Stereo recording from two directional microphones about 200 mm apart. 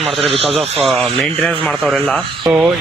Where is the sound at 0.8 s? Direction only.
Centre (ahead or behind).